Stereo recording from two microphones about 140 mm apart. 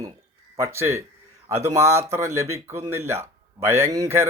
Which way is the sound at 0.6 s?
20° right (ahead or behind).